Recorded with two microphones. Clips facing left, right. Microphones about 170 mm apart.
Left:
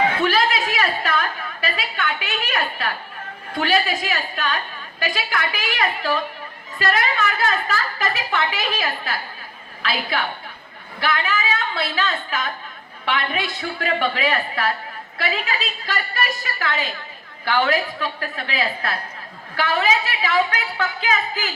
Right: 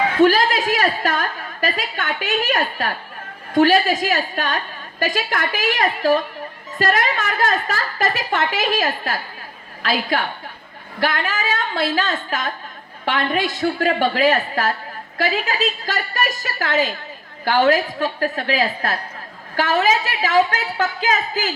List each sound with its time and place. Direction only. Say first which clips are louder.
0.2 s a woman's voice: right 5 dB; 45° right (ahead or behind)